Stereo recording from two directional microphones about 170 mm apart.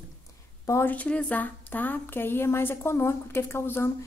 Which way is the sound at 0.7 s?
15° left (ahead or behind).